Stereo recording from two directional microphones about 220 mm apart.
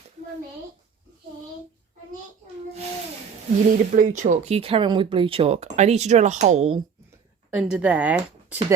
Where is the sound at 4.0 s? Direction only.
35° right (ahead or behind).